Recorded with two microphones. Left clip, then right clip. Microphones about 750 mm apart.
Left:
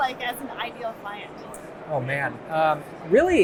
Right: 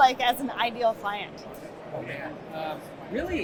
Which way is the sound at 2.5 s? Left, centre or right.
Left.